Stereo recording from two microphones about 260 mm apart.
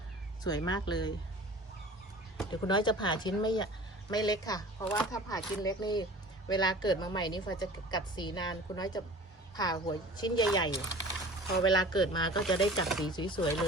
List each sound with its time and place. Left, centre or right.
0.4 s a woman's voice: centre
2.5 s a woman's voice: centre